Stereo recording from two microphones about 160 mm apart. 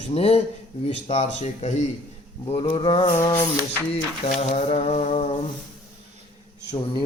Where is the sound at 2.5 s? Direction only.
35° left (ahead or behind).